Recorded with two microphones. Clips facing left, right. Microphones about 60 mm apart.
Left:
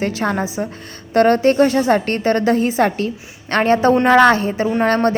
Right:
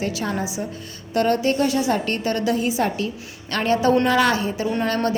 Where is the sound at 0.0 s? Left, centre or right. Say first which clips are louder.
Left 5 dB; left.